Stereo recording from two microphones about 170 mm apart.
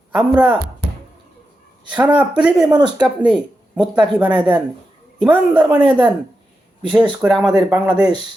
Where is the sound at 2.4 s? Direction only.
5° right (ahead or behind).